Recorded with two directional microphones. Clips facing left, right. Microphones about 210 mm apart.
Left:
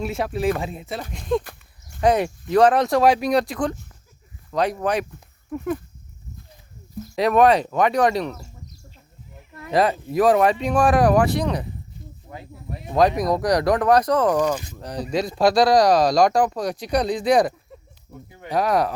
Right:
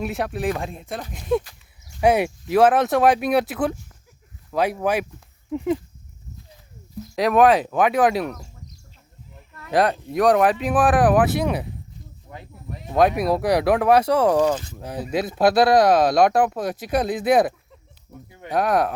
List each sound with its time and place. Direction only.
0.0 s speech: centre (ahead or behind)
5.5 s speech: 20° right (ahead or behind)
7.2 s speech: centre (ahead or behind)
9.7 s speech: centre (ahead or behind)
12.9 s speech: 5° right (ahead or behind)
14.5 s speech: 15° left (ahead or behind)
14.8 s speech: 5° right (ahead or behind)
18.5 s speech: centre (ahead or behind)